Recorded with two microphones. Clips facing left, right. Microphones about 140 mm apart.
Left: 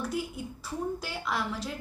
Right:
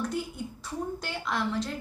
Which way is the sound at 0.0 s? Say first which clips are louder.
Right 1 dB; 5° left (ahead or behind).